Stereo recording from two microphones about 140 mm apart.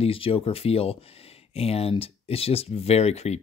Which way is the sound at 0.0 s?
40° left (ahead or behind).